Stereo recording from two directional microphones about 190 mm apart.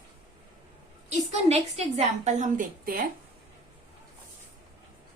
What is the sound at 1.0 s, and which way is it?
A woman's voice, 35° right (ahead or behind).